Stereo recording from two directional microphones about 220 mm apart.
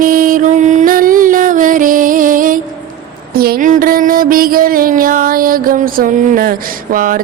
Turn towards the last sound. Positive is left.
turn(degrees=-40)  # may be behind; listen again after turning